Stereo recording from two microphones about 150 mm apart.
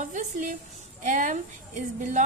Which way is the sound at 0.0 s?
55° right (ahead or behind).